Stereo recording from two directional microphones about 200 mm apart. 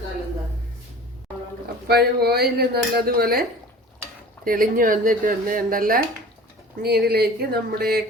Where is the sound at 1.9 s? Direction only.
50° right (ahead or behind).